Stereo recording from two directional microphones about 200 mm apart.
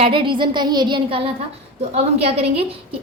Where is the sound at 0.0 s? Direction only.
25° right (ahead or behind).